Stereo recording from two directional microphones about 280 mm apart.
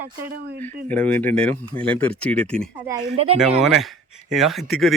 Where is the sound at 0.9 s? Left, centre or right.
Centre.